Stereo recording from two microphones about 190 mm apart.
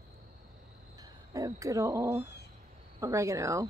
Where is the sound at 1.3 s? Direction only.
15° right (ahead or behind).